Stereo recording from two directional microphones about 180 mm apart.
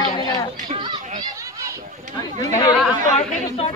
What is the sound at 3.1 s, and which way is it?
Speech, 35° left (ahead or behind).